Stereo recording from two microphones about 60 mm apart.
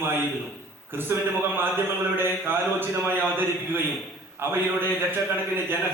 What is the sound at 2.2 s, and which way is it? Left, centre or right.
Speech, right.